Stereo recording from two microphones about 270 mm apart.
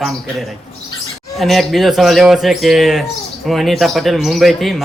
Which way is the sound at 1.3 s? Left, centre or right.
Centre.